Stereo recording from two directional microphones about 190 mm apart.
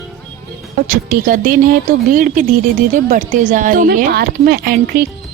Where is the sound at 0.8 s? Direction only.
45° right (ahead or behind).